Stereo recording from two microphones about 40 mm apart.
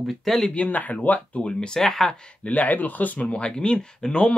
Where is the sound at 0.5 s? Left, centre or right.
Left.